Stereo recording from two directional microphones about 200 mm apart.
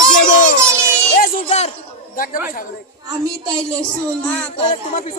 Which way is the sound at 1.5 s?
35° left (ahead or behind).